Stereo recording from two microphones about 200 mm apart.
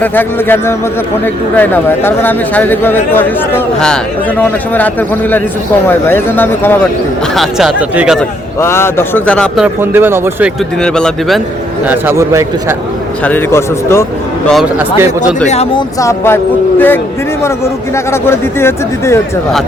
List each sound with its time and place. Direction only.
0.0 s speech: 10° left (ahead or behind)
7.3 s speech: 5° right (ahead or behind)
8.6 s speech: 10° left (ahead or behind)
9.8 s a man's voice: 10° right (ahead or behind)
10.8 s speech: 5° left (ahead or behind)
11.9 s a man's voice: 10° right (ahead or behind)
13.2 s speech: 10° left (ahead or behind)
14.4 s speech: centre (ahead or behind)
15.4 s speech: 30° left (ahead or behind)
16.0 s speech: 15° left (ahead or behind)